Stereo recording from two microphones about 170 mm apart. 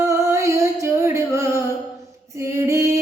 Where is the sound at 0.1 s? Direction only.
15° right (ahead or behind).